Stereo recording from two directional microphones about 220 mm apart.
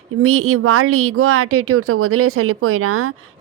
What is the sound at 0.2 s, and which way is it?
Speech, 75° right (ahead or behind).